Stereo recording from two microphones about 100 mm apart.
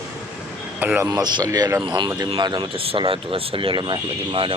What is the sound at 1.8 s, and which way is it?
Speech, 50° right (ahead or behind).